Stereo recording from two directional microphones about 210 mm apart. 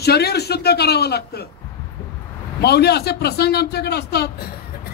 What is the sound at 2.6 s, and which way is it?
A man's voice, 50° left (ahead or behind).